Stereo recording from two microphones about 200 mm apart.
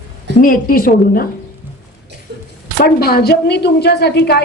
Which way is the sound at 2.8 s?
50° left (ahead or behind).